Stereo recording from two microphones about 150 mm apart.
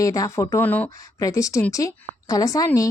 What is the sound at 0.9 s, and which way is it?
Speech, 20° left (ahead or behind).